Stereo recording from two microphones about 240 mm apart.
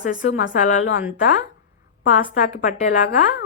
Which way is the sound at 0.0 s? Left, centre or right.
Left.